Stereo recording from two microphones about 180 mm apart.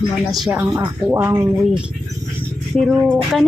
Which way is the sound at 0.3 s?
5° right (ahead or behind).